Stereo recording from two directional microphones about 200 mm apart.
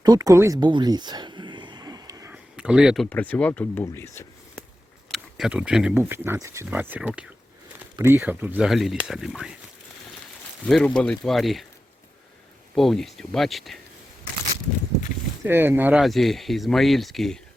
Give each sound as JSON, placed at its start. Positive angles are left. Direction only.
{"t": 0.0, "sound": "a sound", "side_deg": -20}
{"t": 2.3, "sound": "speech", "side_deg": -5}
{"t": 5.1, "sound": "speech", "side_deg": -5}
{"t": 10.7, "sound": "speech", "side_deg": 5}
{"t": 12.7, "sound": "speech", "side_deg": 0}
{"t": 15.4, "sound": "speech", "side_deg": -10}